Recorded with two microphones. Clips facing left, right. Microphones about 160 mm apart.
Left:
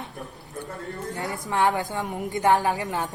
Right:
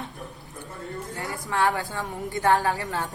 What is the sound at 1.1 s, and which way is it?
A woman's voice, 20° left (ahead or behind).